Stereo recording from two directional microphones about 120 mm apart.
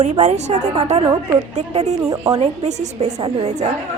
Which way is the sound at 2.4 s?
60° right (ahead or behind).